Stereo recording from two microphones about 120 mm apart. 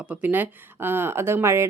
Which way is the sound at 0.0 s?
15° right (ahead or behind).